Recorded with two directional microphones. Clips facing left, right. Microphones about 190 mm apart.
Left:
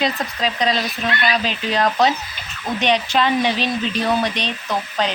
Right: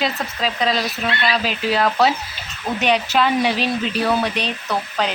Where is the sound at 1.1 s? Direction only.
30° right (ahead or behind).